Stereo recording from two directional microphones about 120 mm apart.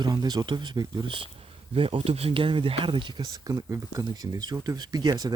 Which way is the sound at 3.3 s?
30° right (ahead or behind).